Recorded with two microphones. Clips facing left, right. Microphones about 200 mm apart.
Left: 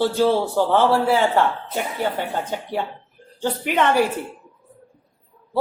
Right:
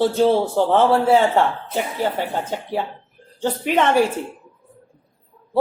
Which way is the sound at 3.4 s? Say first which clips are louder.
Right 2 dB; 25° right (ahead or behind).